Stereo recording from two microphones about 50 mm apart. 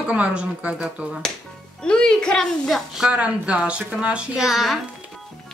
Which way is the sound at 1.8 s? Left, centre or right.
Centre.